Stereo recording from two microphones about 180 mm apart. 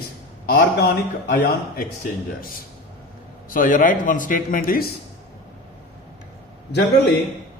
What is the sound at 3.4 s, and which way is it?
Speech, 50° left (ahead or behind).